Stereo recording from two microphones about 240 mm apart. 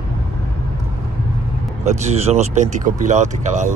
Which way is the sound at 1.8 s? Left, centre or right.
Right.